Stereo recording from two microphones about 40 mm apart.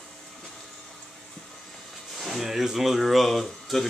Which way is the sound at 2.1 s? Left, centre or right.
Centre.